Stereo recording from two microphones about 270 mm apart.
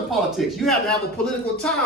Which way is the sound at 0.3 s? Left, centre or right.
Centre.